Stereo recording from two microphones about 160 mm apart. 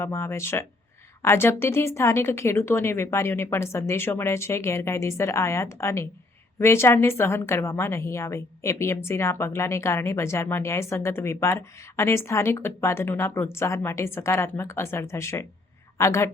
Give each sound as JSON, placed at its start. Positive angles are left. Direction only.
{"t": 0.0, "sound": "a woman's voice", "side_deg": 15}